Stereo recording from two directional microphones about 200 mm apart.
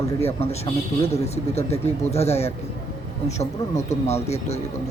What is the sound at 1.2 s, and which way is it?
Speech, 35° left (ahead or behind).